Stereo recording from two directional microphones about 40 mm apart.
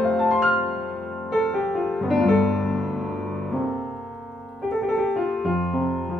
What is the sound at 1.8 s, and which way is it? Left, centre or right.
Music, centre.